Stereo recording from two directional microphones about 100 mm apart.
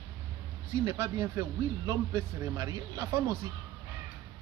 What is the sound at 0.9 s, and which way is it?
A man's voice, 35° right (ahead or behind).